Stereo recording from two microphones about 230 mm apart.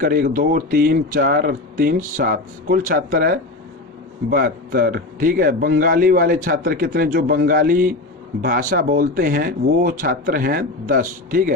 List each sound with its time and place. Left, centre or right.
0.0 s a man's voice: right